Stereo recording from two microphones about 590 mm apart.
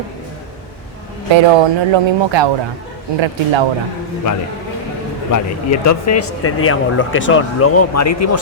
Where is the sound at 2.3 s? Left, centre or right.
Right.